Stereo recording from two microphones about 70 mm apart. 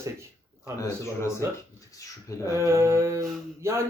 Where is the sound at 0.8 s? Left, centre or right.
Left.